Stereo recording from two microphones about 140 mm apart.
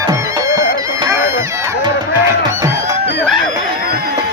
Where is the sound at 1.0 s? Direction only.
20° right (ahead or behind).